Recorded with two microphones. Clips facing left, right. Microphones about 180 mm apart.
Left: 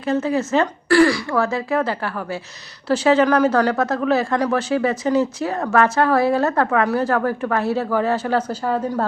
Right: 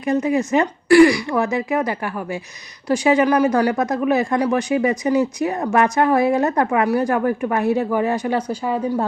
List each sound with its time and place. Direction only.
0.0 s speech: 15° right (ahead or behind)